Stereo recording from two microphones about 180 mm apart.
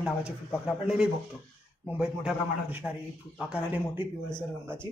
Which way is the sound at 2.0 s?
5° right (ahead or behind).